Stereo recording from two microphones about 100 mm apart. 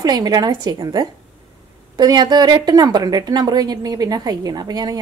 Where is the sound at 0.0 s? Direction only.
40° right (ahead or behind).